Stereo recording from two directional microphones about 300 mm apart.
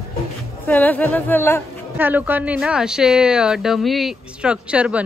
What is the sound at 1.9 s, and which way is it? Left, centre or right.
Speech, centre.